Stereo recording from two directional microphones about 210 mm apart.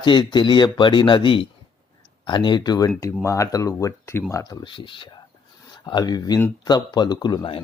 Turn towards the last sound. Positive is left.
turn(degrees=20)  # may be behind; listen again after turning